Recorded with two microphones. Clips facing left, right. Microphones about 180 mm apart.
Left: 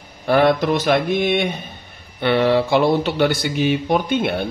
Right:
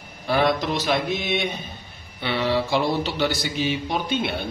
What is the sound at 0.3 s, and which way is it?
A man's voice, 55° left (ahead or behind).